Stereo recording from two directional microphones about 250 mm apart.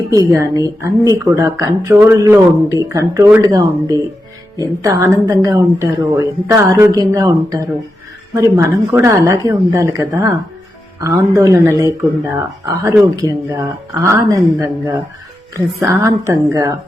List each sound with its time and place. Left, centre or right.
0.1 s a woman's voice: centre